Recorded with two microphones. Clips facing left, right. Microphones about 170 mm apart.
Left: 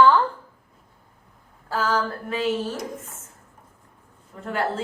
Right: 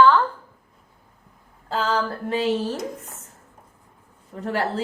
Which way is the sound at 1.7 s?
30° right (ahead or behind).